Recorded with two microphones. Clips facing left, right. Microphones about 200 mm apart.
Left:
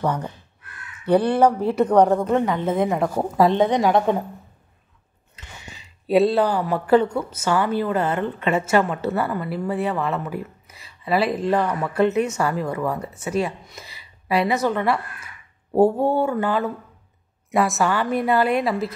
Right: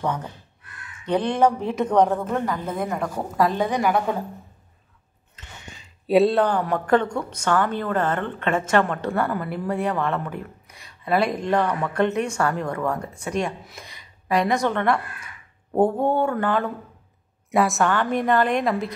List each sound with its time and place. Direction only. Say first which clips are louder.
1.0 s a woman's voice: left 3 dB; 10° left (ahead or behind)
5.3 s a woman's voice: left 1 dB; 10° left (ahead or behind)